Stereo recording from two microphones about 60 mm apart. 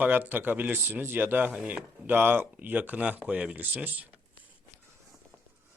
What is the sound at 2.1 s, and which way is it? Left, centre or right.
Speech, right.